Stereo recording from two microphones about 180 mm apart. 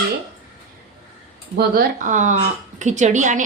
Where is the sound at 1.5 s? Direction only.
55° right (ahead or behind).